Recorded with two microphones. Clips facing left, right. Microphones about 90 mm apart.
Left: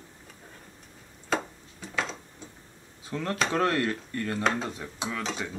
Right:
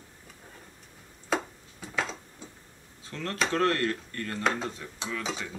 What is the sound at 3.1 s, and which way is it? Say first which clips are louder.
Speech: left 2 dB; 15° left (ahead or behind).